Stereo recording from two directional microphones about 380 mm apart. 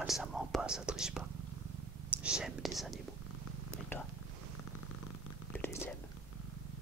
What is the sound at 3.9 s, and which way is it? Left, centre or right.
Purr, centre.